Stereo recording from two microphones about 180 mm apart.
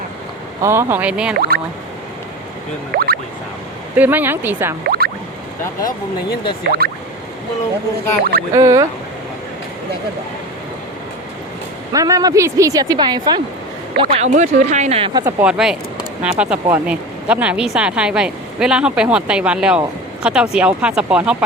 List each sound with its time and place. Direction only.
0.6 s speech: 15° right (ahead or behind)
1.4 s music: 60° right (ahead or behind)
2.9 s speech: 60° right (ahead or behind)
3.9 s speech: 10° right (ahead or behind)
4.8 s music: 60° right (ahead or behind)
6.7 s speech: 60° right (ahead or behind)
8.2 s speech: 60° right (ahead or behind)
8.5 s speech: 20° right (ahead or behind)
11.9 s a woman's voice: 20° right (ahead or behind)
14.0 s speech: 35° right (ahead or behind)
15.2 s speech: 10° right (ahead or behind)